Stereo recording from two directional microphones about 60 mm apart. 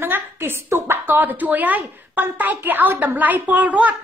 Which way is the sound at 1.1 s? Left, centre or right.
Right.